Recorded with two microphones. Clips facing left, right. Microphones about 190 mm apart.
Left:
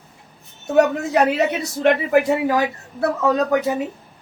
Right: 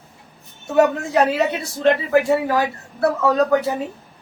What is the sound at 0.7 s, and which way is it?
Speech, 20° left (ahead or behind).